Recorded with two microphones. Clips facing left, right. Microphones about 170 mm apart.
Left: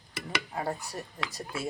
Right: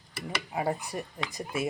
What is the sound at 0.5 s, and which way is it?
Speech, 10° right (ahead or behind).